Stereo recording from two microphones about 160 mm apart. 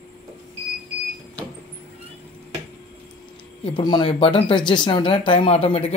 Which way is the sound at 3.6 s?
30° left (ahead or behind).